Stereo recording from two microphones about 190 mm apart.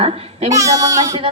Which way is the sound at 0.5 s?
20° right (ahead or behind).